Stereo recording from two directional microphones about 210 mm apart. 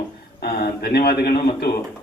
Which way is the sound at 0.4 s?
50° left (ahead or behind).